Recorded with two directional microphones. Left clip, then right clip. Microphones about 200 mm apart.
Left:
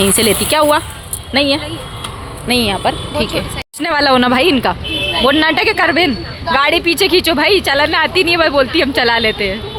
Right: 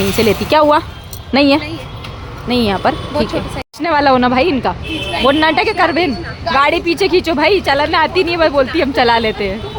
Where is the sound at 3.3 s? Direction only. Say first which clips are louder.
Left 1 dB; 5° right (ahead or behind).